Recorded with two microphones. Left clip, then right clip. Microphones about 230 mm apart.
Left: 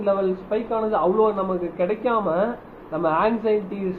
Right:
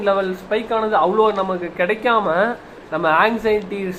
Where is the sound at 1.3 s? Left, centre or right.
Centre.